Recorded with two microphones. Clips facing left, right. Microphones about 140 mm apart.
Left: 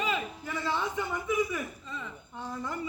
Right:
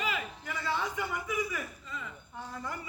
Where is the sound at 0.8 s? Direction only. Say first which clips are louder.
Left 2 dB; 25° left (ahead or behind).